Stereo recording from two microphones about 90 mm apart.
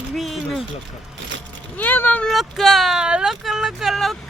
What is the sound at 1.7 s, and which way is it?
Speech, 20° left (ahead or behind).